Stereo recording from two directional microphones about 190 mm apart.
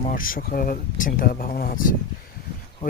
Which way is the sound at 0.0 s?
50° left (ahead or behind).